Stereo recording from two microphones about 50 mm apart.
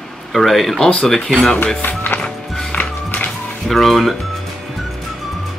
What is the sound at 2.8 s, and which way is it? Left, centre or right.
Music, left.